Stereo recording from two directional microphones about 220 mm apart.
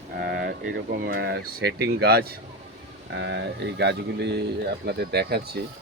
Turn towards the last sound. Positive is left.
turn(degrees=-45)  # may be behind; listen again after turning